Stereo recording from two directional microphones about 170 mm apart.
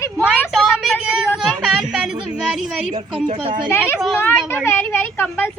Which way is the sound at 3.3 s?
30° right (ahead or behind).